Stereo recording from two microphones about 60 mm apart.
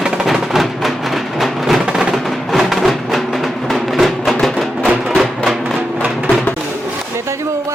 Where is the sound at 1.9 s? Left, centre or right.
Centre.